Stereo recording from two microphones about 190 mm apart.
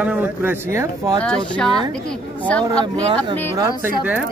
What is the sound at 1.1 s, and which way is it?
Speech, 5° left (ahead or behind).